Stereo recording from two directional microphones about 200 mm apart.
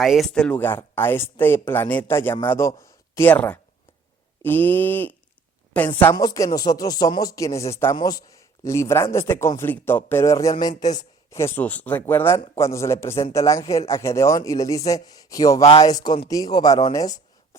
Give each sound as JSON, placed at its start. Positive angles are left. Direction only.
{"t": 0.0, "sound": "speech", "side_deg": 0}